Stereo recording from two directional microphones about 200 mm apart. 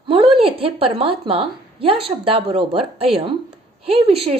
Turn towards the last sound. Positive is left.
turn(degrees=-30)  # may be behind; listen again after turning